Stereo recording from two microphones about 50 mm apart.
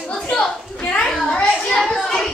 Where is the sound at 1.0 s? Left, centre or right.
Centre.